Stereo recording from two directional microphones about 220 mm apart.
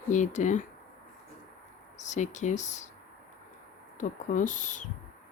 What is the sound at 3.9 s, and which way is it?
Speech, 35° left (ahead or behind).